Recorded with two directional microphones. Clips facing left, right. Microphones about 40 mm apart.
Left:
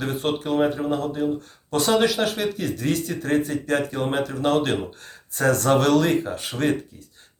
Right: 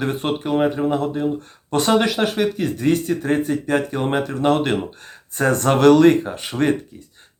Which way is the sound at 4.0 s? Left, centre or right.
Right.